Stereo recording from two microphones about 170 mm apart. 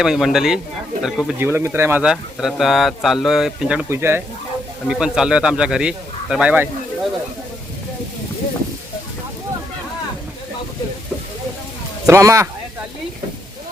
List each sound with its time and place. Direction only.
0.0 s speech: centre (ahead or behind)
1.4 s speech: 15° right (ahead or behind)
12.0 s speech: 20° right (ahead or behind)